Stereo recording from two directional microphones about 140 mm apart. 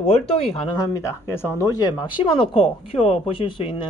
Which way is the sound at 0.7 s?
25° left (ahead or behind).